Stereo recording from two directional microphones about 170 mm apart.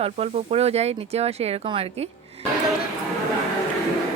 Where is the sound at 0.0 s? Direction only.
40° right (ahead or behind).